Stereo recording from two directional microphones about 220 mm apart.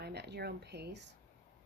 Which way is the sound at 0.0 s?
50° right (ahead or behind).